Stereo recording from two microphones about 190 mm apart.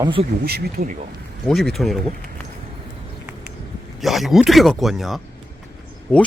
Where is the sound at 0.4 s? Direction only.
55° right (ahead or behind).